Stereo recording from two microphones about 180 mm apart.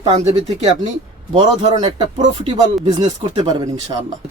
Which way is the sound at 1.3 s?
25° right (ahead or behind).